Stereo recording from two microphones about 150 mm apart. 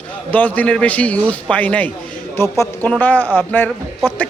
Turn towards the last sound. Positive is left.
turn(degrees=15)  # may be behind; listen again after turning